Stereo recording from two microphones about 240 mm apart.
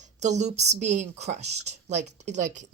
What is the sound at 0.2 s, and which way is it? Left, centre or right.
A woman's voice, right.